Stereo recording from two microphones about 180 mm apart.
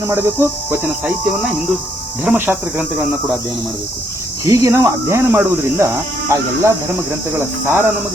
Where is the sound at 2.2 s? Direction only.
10° right (ahead or behind).